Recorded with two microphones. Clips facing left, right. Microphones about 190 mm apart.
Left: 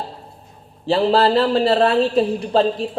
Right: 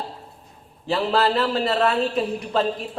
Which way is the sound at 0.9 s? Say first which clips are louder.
Left 5 dB; 30° left (ahead or behind).